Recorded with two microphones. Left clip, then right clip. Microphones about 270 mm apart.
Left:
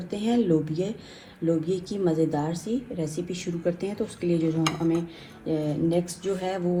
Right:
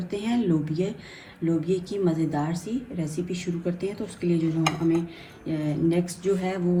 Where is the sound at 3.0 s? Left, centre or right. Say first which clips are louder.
Right 1 dB; centre.